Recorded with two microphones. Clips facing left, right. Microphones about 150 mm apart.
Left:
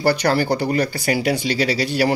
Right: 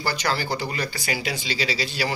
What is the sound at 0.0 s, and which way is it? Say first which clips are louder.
Speech: left 9 dB; 60° left (ahead or behind).